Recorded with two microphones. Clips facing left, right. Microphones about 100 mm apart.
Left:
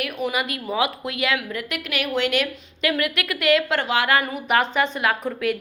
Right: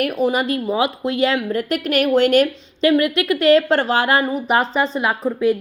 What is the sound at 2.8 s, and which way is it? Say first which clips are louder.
A woman's voice: right 8 dB; 25° right (ahead or behind).